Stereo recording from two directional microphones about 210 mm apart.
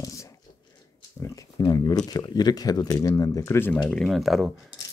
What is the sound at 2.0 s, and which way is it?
Speech, 20° left (ahead or behind).